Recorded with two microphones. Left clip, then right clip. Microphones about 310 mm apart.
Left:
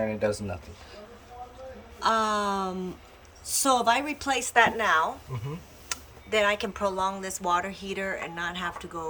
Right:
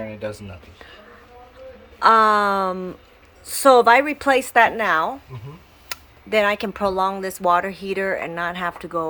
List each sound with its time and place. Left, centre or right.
2.0 s speech: centre